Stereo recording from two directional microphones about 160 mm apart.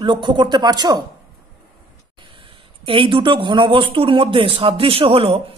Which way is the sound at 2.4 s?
30° right (ahead or behind).